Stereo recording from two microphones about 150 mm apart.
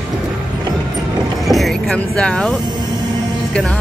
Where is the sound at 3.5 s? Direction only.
5° left (ahead or behind).